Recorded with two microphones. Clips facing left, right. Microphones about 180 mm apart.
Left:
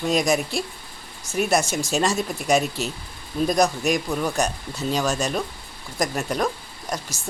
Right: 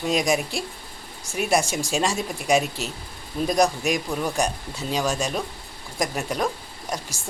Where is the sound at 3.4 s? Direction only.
10° right (ahead or behind).